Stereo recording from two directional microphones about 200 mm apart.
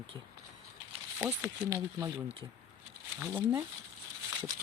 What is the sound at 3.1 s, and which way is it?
Speech, 10° right (ahead or behind).